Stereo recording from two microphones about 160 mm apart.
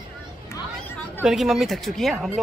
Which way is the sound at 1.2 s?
Centre (ahead or behind).